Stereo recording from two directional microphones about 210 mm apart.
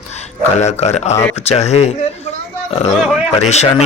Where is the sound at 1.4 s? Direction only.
30° left (ahead or behind).